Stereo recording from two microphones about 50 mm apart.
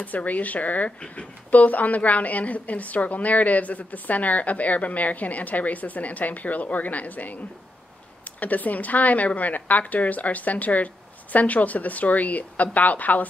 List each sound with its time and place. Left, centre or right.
0.0 s speech: left
8.4 s speech: left